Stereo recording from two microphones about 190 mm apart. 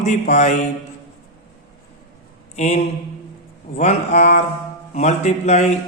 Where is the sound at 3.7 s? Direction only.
35° left (ahead or behind).